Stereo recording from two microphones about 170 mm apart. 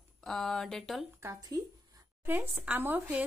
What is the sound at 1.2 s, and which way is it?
Speech, 20° right (ahead or behind).